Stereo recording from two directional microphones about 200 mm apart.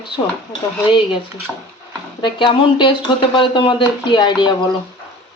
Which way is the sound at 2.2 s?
25° left (ahead or behind).